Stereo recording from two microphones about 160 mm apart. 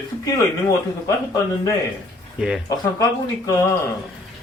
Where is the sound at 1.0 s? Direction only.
20° left (ahead or behind).